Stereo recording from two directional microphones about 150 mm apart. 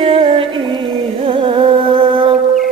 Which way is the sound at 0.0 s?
35° right (ahead or behind).